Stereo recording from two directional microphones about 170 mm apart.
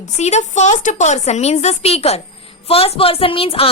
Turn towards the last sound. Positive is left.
turn(degrees=35)  # may be behind; listen again after turning